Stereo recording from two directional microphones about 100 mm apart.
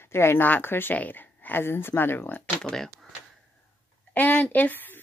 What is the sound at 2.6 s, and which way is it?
Speech, 5° left (ahead or behind).